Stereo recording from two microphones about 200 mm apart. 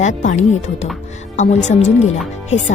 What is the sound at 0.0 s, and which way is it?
Speech, 35° left (ahead or behind).